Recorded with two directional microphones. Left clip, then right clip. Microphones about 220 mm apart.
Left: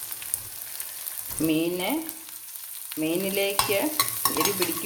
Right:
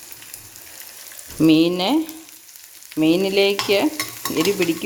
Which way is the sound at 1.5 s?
50° right (ahead or behind).